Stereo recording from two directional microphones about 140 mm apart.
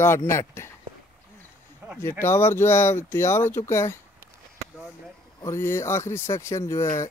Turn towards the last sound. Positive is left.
turn(degrees=20)  # may be behind; listen again after turning